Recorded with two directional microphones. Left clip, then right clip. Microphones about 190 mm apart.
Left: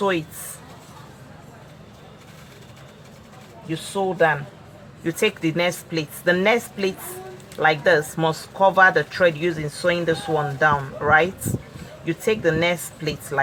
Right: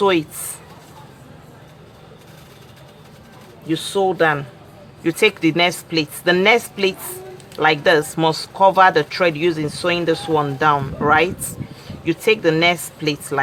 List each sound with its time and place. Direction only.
0.0 s speech: 30° right (ahead or behind)
3.7 s speech: 35° right (ahead or behind)
5.0 s speech: 25° right (ahead or behind)